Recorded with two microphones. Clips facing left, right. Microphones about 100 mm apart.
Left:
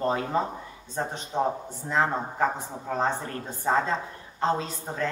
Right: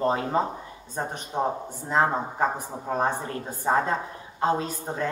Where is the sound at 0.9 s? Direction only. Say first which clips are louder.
Even; 15° right (ahead or behind).